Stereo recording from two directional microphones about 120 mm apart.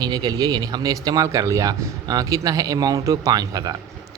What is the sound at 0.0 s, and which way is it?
A man's voice, 35° right (ahead or behind).